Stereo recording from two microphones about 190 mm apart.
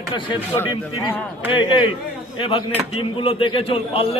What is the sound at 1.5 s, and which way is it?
A man's voice, 25° left (ahead or behind).